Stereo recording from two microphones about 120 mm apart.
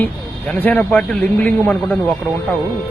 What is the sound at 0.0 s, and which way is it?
Speech, 15° left (ahead or behind).